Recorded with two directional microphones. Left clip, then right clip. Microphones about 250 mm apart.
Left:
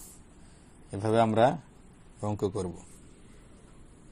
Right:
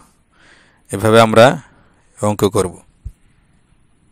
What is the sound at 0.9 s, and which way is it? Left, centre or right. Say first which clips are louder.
Speech: right 16 dB; right.